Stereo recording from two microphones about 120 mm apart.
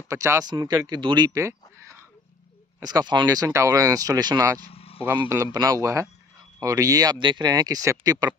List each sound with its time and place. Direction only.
0.1 s a man's voice: 25° right (ahead or behind)
1.3 s speech: 25° right (ahead or behind)
4.6 s vehicle: 55° left (ahead or behind)
5.3 s a man's voice: 30° right (ahead or behind)